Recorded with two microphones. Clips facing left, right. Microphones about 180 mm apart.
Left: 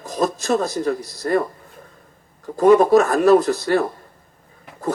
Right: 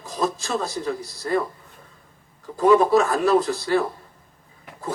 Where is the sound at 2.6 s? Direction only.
45° left (ahead or behind).